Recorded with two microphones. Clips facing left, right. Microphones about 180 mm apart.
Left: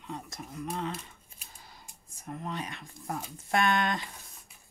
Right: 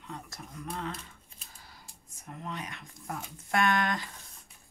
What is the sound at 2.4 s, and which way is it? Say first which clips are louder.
Speech: left 1 dB; 30° left (ahead or behind).